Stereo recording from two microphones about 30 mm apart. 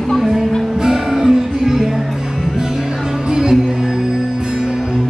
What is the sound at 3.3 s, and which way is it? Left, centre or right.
Music, centre.